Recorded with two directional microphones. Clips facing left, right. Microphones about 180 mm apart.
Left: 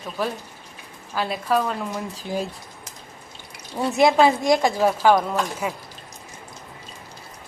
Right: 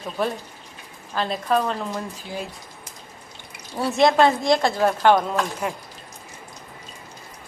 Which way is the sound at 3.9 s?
5° left (ahead or behind).